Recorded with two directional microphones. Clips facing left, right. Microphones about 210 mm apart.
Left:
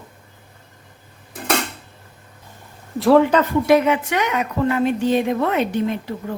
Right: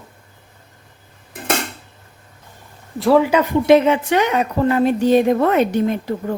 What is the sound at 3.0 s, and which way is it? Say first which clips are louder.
A woman's voice: even; centre (ahead or behind).